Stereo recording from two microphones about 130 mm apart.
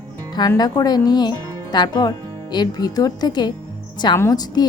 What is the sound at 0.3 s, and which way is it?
Speech, 30° left (ahead or behind).